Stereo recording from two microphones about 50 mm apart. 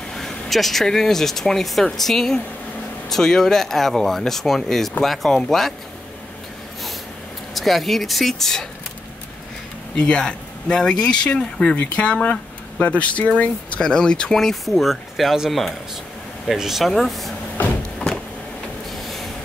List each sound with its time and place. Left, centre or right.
0.1 s speech: centre
7.5 s speech: centre
9.9 s speech: centre
11.7 s speech: left
14.4 s speech: centre